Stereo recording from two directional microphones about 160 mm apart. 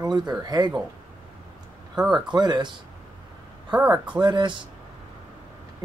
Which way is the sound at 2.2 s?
25° right (ahead or behind).